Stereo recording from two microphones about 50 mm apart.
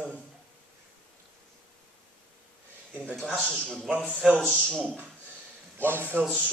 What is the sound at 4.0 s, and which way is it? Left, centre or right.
Speech, left.